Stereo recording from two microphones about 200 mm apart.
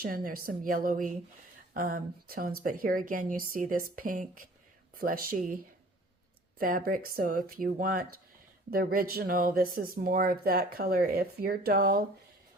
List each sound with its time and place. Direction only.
0.0 s speech: 45° right (ahead or behind)
6.6 s speech: 45° right (ahead or behind)